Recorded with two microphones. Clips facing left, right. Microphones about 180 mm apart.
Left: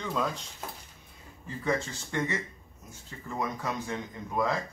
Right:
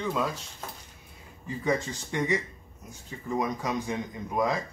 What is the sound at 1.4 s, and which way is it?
Speech, 15° right (ahead or behind).